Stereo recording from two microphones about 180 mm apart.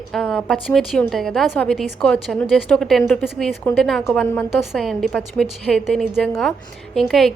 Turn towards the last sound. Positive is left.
turn(degrees=0)  # may be behind; listen again after turning